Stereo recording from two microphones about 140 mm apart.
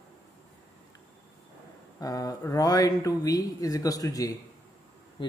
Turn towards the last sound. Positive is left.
turn(degrees=35)  # may be behind; listen again after turning